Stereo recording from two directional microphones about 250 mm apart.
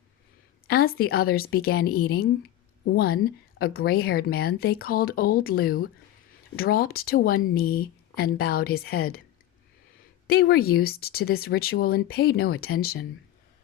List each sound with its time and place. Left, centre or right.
0.7 s speech: left
10.2 s speech: left